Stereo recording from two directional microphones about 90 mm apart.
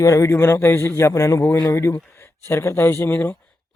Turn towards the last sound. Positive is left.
turn(degrees=25)  # may be behind; listen again after turning